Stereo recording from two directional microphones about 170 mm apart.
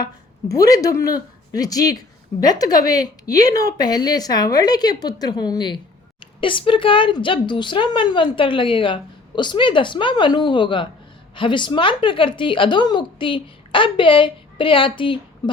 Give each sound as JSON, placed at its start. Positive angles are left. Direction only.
{"t": 0.0, "sound": "a woman's voice", "side_deg": 20}